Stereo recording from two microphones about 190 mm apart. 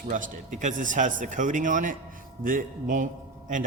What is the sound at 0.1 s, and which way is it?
Speech, 40° right (ahead or behind).